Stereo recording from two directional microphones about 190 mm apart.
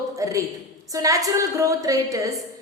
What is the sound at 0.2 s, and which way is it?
A woman's voice, 15° right (ahead or behind).